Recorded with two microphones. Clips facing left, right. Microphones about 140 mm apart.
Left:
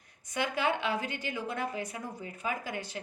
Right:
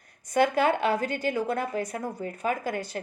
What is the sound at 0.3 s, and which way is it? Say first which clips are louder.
A woman's voice: right 8 dB; 45° right (ahead or behind).